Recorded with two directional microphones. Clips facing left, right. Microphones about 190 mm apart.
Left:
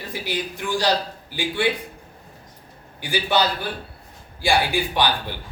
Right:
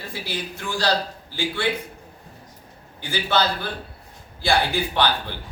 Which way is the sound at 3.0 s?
15° left (ahead or behind).